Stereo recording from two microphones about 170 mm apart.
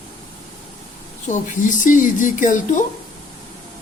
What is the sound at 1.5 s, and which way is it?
Speech, 50° left (ahead or behind).